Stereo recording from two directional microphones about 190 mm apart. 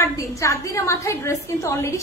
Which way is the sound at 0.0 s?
15° left (ahead or behind).